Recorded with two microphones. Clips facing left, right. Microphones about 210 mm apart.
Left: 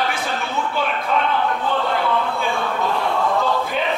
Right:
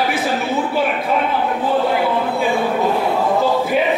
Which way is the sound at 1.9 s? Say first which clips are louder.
Right 3 dB; 10° right (ahead or behind).